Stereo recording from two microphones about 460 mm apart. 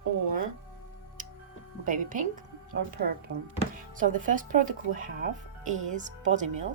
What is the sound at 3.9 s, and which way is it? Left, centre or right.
A woman's voice, centre.